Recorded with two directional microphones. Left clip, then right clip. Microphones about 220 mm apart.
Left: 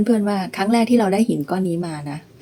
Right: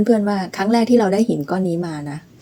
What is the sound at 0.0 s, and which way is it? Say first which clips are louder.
A woman's voice: right 2 dB; centre (ahead or behind).